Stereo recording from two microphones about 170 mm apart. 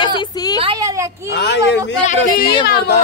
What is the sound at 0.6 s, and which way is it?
Speech, 25° right (ahead or behind).